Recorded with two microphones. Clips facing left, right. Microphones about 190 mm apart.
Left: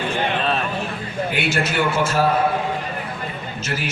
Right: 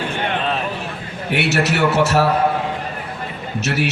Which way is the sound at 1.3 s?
70° right (ahead or behind).